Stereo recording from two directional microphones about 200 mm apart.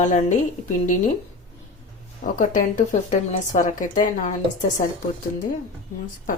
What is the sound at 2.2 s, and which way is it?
Speech, 40° left (ahead or behind).